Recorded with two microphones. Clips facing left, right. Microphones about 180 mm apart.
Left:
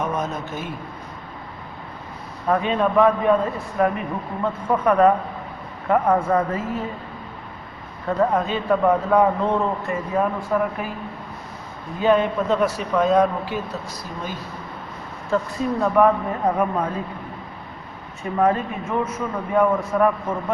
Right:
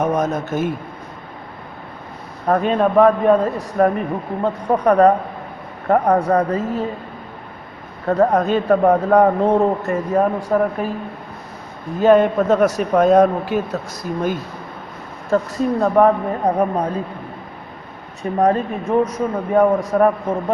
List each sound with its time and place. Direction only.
0.0 s a sound: 45° right (ahead or behind)
2.5 s a man's voice: 45° right (ahead or behind)
8.0 s a man's voice: 45° right (ahead or behind)
11.9 s a man's voice: 45° right (ahead or behind)
15.3 s a man's voice: 40° right (ahead or behind)
18.2 s a man's voice: 40° right (ahead or behind)